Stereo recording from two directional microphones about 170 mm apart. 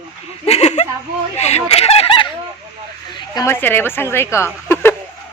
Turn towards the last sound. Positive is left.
turn(degrees=15)  # may be behind; listen again after turning